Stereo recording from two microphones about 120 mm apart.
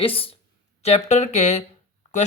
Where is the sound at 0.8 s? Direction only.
65° left (ahead or behind).